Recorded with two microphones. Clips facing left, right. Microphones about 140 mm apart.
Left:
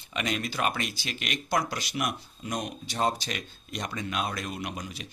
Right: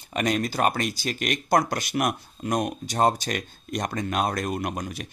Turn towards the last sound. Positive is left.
turn(degrees=-50)  # may be behind; listen again after turning